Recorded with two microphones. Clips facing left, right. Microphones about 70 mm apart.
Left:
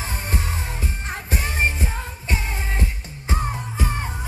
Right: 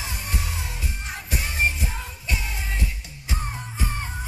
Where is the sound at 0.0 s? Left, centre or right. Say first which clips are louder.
Left 4 dB; left.